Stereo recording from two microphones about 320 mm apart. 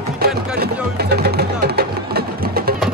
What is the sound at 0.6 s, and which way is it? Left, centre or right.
Music, right.